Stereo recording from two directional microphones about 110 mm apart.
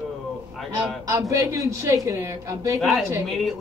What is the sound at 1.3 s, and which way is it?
A man's voice, 30° right (ahead or behind).